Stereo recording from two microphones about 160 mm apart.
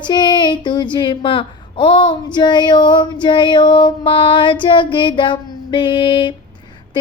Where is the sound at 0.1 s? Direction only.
25° left (ahead or behind).